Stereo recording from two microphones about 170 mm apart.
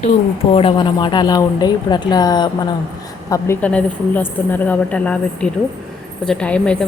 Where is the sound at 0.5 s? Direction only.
30° left (ahead or behind).